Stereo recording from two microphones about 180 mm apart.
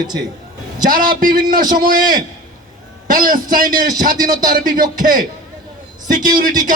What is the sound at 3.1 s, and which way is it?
Music, 50° right (ahead or behind).